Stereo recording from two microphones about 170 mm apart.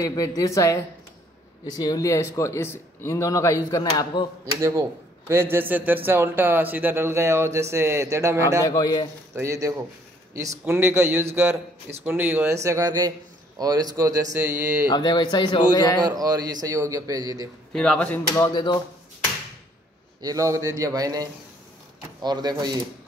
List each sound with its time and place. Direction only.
0.0 s speech: 20° left (ahead or behind)
4.6 s speech: 20° right (ahead or behind)
8.6 s speech: 20° left (ahead or behind)
9.3 s speech: 15° right (ahead or behind)
12.6 s speech: 20° right (ahead or behind)
14.9 s speech: 25° left (ahead or behind)
16.0 s speech: 25° right (ahead or behind)
17.7 s speech: 5° left (ahead or behind); by 18.8 s 25° left (ahead or behind)
20.2 s speech: 20° right (ahead or behind)